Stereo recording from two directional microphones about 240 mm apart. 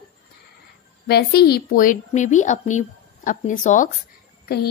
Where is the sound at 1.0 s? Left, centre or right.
Left.